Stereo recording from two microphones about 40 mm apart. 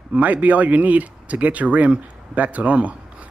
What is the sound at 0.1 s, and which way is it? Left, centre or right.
Speech, right.